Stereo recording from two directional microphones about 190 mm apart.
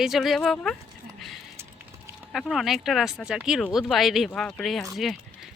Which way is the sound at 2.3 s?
Centre (ahead or behind).